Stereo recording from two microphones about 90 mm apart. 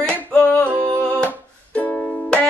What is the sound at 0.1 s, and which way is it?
Singing, 15° left (ahead or behind).